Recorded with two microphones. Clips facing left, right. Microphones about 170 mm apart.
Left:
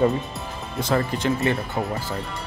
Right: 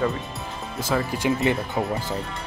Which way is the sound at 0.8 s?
5° right (ahead or behind).